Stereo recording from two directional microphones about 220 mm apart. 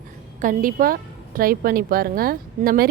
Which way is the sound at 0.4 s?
40° right (ahead or behind).